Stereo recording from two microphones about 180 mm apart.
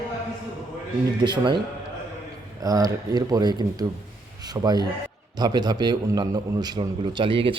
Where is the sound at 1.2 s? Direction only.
25° right (ahead or behind).